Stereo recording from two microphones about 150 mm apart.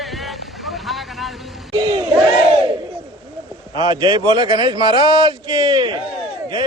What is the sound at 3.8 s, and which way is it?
A man's voice, 25° right (ahead or behind).